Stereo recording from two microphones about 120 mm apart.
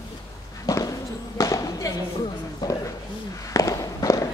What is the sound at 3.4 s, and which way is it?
Walk, 30° left (ahead or behind).